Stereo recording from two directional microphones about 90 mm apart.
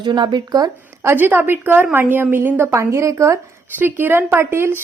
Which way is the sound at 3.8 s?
25° right (ahead or behind).